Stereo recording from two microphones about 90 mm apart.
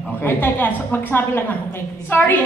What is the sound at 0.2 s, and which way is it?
A woman's voice, 25° left (ahead or behind).